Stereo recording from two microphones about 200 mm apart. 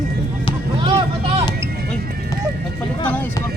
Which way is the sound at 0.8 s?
25° right (ahead or behind).